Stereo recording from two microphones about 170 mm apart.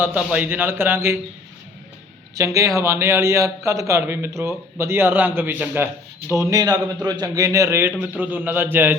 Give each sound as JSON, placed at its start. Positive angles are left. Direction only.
{"t": 0.0, "sound": "a man's voice", "side_deg": -10}
{"t": 2.3, "sound": "a man's voice", "side_deg": -20}